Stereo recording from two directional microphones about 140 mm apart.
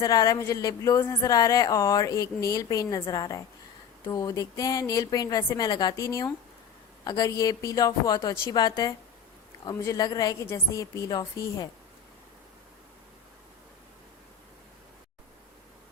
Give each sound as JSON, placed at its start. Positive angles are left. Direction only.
{"t": 0.0, "sound": "speech", "side_deg": 25}